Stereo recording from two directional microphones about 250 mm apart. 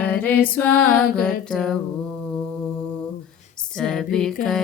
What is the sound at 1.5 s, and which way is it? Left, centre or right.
Female singing, centre.